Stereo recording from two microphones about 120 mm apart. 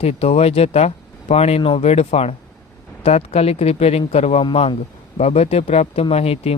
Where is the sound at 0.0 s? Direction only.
60° left (ahead or behind).